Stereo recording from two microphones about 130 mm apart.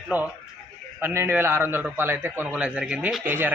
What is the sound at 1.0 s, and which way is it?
A man's voice, 20° right (ahead or behind).